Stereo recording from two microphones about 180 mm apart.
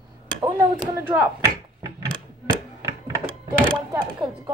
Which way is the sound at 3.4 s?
20° right (ahead or behind).